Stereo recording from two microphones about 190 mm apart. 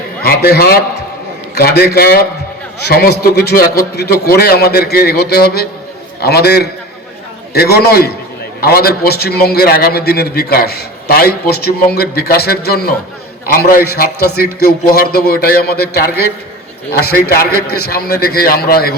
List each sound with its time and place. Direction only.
0.2 s a man's voice: 55° left (ahead or behind)